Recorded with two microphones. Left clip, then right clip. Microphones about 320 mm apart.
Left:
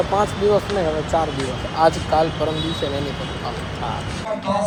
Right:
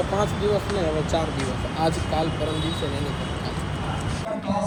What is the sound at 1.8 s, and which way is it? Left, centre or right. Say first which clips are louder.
Speech: left 8 dB; left.